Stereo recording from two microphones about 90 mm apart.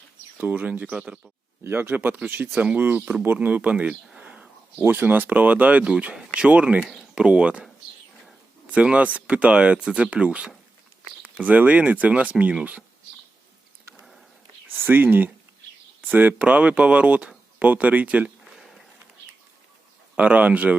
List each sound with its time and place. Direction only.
0.3 s speech: 15° right (ahead or behind)
1.6 s speech: 25° right (ahead or behind)
4.1 s a sound: 10° right (ahead or behind)
4.8 s speech: 20° right (ahead or behind)
14.8 s speech: 20° right (ahead or behind)
18.5 s a sound: centre (ahead or behind)
20.1 s speech: 15° right (ahead or behind)